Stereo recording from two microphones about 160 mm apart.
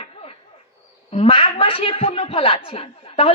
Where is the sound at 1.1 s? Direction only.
40° left (ahead or behind).